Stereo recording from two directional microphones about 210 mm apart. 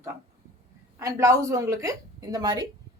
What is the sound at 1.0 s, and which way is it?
A woman's voice, 15° right (ahead or behind).